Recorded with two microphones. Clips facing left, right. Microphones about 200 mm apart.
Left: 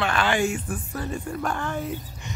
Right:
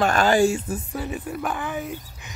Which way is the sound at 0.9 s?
5° right (ahead or behind).